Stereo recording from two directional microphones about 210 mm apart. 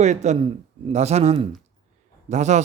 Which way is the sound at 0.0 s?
35° right (ahead or behind).